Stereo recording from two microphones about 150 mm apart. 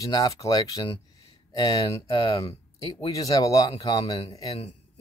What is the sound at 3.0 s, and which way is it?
Speech, 25° left (ahead or behind).